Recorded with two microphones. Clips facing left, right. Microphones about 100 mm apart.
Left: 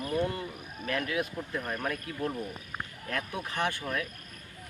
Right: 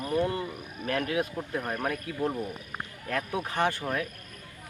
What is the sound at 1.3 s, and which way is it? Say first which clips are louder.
Speech: right 3 dB; 25° right (ahead or behind).